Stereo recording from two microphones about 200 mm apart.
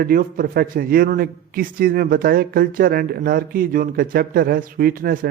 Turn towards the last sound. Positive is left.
turn(degrees=-50)  # may be behind; listen again after turning